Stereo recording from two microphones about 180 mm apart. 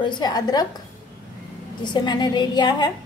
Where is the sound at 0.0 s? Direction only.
25° left (ahead or behind).